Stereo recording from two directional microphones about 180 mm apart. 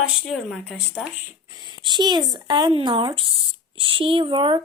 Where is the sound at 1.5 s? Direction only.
20° right (ahead or behind).